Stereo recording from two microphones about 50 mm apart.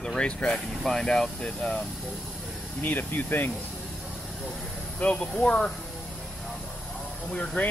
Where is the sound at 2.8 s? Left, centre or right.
Left.